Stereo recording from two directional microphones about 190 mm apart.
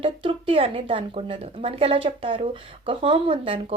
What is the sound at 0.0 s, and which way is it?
A woman's voice, 30° right (ahead or behind).